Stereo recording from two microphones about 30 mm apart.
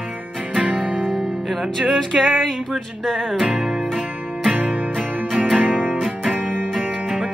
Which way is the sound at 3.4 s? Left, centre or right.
Right.